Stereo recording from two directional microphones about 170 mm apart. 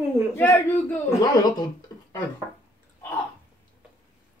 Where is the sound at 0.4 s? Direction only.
10° left (ahead or behind).